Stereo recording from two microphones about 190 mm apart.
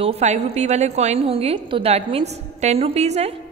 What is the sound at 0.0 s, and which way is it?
A woman's voice, 35° right (ahead or behind).